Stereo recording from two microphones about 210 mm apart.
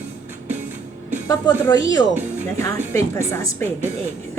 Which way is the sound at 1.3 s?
15° left (ahead or behind).